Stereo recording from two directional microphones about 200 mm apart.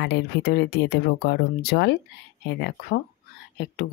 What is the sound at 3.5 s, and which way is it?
Speech, 55° left (ahead or behind).